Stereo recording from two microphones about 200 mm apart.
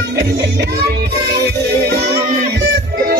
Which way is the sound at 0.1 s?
55° right (ahead or behind).